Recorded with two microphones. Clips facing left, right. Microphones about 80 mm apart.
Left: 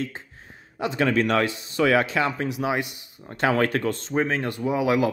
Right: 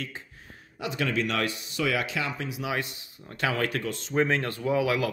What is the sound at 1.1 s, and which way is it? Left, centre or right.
Speech, left.